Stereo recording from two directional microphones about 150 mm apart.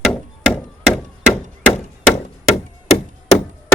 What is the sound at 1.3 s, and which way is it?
Chop, 45° left (ahead or behind).